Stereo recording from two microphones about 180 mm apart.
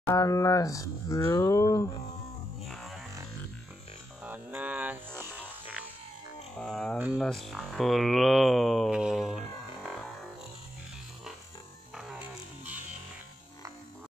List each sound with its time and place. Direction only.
0.0 s speech: 15° left (ahead or behind)
2.6 s music: centre (ahead or behind)
4.2 s music: 10° right (ahead or behind)
6.6 s speech: 5° left (ahead or behind)
11.9 s a sound: 5° right (ahead or behind)